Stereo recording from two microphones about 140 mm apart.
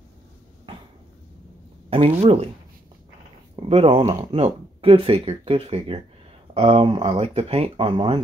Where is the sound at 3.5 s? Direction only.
40° right (ahead or behind).